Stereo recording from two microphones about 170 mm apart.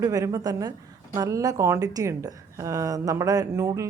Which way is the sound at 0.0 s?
20° right (ahead or behind).